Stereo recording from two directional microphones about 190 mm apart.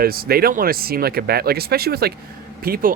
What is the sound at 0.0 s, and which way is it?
Speech, 50° right (ahead or behind).